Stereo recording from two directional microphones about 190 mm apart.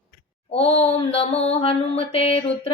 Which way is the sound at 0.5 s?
30° left (ahead or behind).